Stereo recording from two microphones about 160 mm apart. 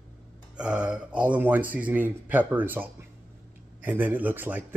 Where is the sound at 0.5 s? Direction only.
5° right (ahead or behind).